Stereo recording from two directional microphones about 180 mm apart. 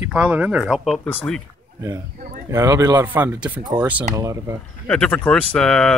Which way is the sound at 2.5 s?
15° right (ahead or behind).